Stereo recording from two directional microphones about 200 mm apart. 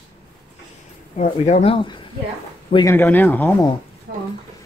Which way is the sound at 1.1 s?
35° left (ahead or behind).